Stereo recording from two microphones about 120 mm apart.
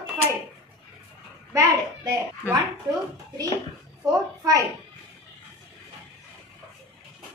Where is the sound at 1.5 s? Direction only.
25° right (ahead or behind).